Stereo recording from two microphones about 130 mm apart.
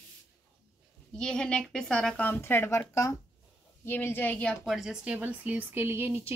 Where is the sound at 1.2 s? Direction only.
5° left (ahead or behind).